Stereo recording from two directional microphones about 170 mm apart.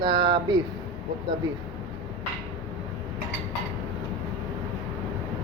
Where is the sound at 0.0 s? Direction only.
30° right (ahead or behind).